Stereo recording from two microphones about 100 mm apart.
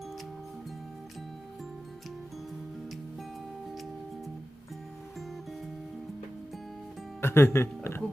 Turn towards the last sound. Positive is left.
turn(degrees=25)  # may be behind; listen again after turning